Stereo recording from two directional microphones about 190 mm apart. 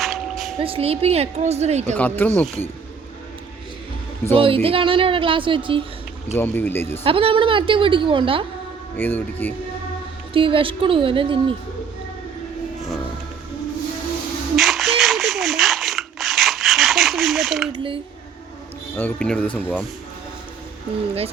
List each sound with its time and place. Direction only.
0.0 s a sound: centre (ahead or behind)
0.6 s a woman's voice: 30° right (ahead or behind)
2.0 s speech: 10° left (ahead or behind)
4.4 s a woman's voice: 30° right (ahead or behind)
6.3 s speech: 10° left (ahead or behind)
7.0 s a woman's voice: 30° right (ahead or behind)
9.0 s speech: 10° left (ahead or behind)
10.3 s a woman's voice: 25° right (ahead or behind)
14.5 s a sound: centre (ahead or behind)
17.7 s speech: 25° right (ahead or behind)
18.9 s speech: 5° left (ahead or behind)